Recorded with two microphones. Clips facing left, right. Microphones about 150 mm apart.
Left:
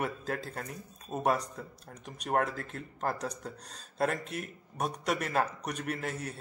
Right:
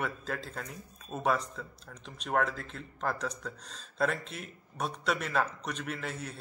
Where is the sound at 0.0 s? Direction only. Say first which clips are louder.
Left 2 dB; 40° left (ahead or behind).